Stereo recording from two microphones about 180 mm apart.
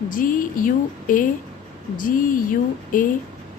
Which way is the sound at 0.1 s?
50° left (ahead or behind).